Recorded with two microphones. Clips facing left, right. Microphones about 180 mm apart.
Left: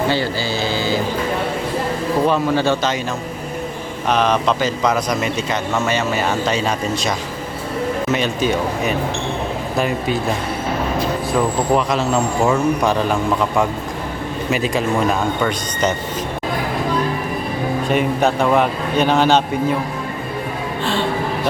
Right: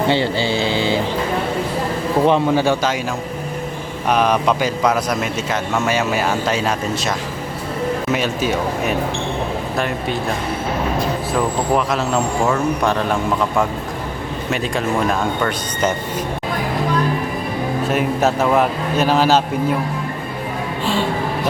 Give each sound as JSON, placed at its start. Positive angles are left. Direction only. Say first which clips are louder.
{"t": 0.1, "sound": "speech", "louder": "right 2 dB", "side_deg": -25}
{"t": 2.2, "sound": "speech", "louder": "right 2 dB", "side_deg": -15}
{"t": 4.1, "sound": "speech", "louder": "right 1 dB", "side_deg": -10}
{"t": 8.1, "sound": "speech", "louder": "left 2 dB", "side_deg": -5}
{"t": 11.3, "sound": "speech", "louder": "left 1 dB", "side_deg": 0}
{"t": 17.8, "sound": "speech", "louder": "left 1 dB", "side_deg": -5}